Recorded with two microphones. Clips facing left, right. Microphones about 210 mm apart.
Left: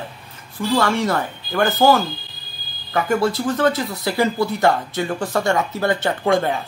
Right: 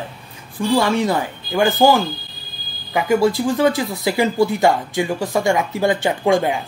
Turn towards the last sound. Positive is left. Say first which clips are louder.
# right 2 dB
turn(degrees=-15)  # may be behind; listen again after turning